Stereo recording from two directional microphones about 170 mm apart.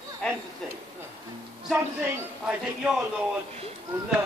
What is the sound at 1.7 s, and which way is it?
A man's voice, 15° right (ahead or behind).